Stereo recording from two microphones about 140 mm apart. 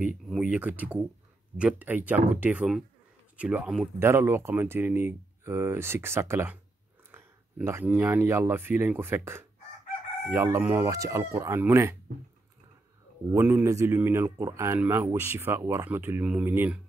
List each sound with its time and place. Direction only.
0.3 s speech: 10° right (ahead or behind)
4.0 s speech: 15° right (ahead or behind)
13.3 s speech: 15° right (ahead or behind)